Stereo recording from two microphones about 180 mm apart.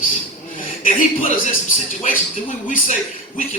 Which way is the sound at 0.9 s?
45° left (ahead or behind).